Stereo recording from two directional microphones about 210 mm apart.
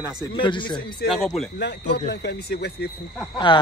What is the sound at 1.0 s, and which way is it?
Speech, 55° left (ahead or behind).